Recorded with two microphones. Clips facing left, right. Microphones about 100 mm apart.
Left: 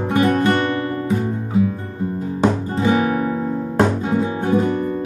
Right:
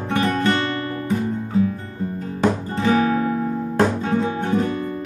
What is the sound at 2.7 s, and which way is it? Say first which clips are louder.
Guitar: left 1 dB; 15° left (ahead or behind).